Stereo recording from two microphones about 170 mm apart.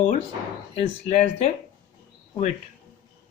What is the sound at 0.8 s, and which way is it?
Speech, 40° left (ahead or behind).